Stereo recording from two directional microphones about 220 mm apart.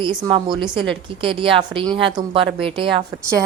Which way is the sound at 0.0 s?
20° right (ahead or behind).